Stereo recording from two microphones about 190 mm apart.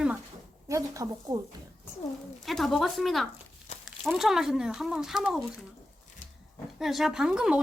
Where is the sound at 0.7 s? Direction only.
20° right (ahead or behind).